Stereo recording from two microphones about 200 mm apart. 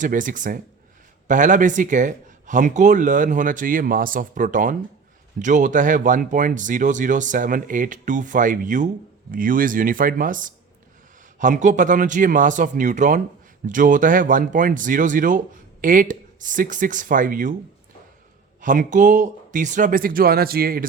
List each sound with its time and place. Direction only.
0.0 s speech: 40° right (ahead or behind)
18.6 s speech: 40° right (ahead or behind)